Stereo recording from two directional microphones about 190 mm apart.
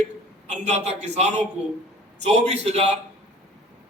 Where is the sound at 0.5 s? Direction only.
35° right (ahead or behind).